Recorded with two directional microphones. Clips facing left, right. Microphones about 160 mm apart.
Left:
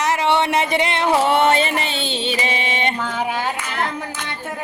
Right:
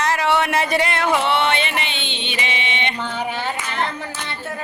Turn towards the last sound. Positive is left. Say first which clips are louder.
# left 1 dB
turn(degrees=10)  # may be behind; listen again after turning